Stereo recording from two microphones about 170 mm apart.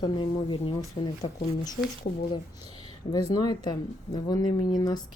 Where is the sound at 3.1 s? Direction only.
25° left (ahead or behind).